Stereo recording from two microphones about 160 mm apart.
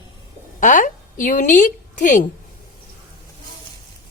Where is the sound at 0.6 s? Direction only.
55° left (ahead or behind).